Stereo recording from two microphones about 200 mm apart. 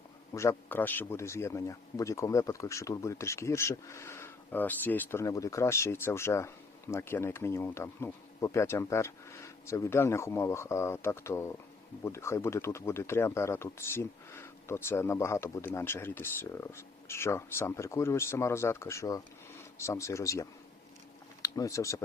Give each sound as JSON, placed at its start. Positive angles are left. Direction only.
{"t": 0.3, "sound": "a man's voice", "side_deg": 10}